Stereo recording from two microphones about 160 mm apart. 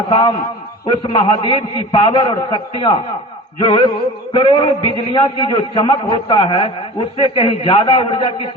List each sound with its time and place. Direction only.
0.1 s a man's voice: 30° left (ahead or behind)
3.6 s a sound: 30° left (ahead or behind)
4.9 s a man's voice: 30° left (ahead or behind)